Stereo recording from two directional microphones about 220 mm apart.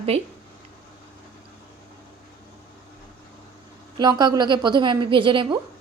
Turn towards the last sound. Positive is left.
turn(degrees=-20)  # may be behind; listen again after turning